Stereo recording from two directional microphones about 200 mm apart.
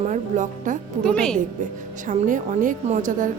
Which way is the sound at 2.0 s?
40° right (ahead or behind).